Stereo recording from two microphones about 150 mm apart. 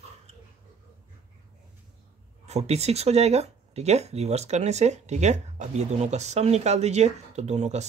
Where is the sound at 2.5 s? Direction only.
45° right (ahead or behind).